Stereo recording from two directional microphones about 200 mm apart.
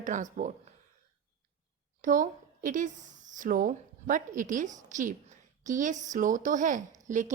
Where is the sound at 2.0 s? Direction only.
40° right (ahead or behind).